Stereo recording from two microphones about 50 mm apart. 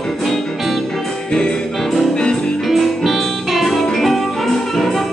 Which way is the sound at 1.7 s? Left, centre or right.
Centre.